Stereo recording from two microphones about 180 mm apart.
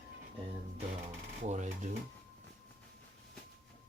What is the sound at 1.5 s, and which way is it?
Speech, 40° right (ahead or behind).